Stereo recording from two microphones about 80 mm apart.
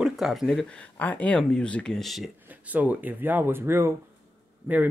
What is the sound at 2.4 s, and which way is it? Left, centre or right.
Speech, centre.